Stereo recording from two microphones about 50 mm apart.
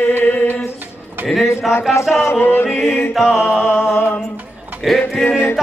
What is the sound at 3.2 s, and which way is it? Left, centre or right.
Music, left.